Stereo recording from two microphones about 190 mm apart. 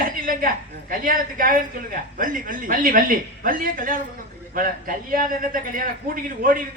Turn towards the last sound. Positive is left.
turn(degrees=-45)  # may be behind; listen again after turning